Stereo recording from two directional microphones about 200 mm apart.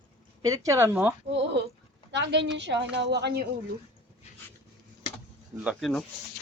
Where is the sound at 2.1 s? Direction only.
60° right (ahead or behind).